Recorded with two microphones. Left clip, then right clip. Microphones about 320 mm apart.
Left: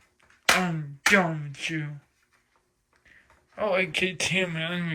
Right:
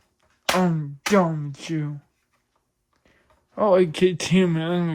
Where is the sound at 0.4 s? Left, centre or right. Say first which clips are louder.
Right 1 dB; centre.